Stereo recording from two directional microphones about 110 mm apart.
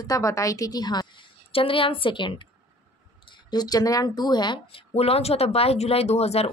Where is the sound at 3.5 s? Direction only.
35° left (ahead or behind); by 6.4 s 70° left (ahead or behind).